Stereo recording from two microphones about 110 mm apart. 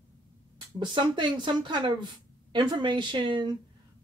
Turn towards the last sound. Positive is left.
turn(degrees=-45)  # may be behind; listen again after turning